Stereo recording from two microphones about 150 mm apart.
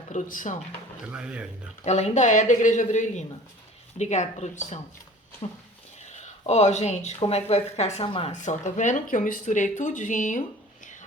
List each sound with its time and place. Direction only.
0.1 s speech: 60° left (ahead or behind)
1.1 s speech: 5° right (ahead or behind)
1.8 s speech: 50° left (ahead or behind)
6.1 s speech: 50° left (ahead or behind)
8.0 s speech: 35° left (ahead or behind)
8.3 s speech: 55° left (ahead or behind)